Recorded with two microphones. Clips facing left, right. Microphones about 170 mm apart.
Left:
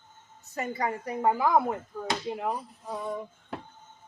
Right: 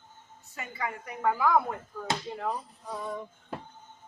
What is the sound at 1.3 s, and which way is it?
Speech, 25° left (ahead or behind).